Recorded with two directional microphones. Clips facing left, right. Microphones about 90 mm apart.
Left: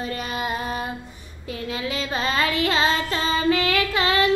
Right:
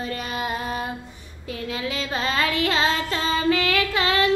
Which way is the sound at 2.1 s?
20° left (ahead or behind).